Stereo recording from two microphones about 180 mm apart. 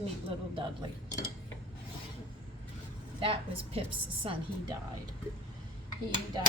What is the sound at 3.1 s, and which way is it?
A woman's voice, 30° right (ahead or behind).